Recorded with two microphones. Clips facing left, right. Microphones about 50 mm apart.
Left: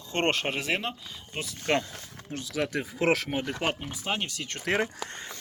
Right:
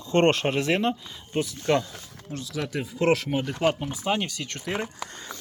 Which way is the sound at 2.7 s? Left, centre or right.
Left.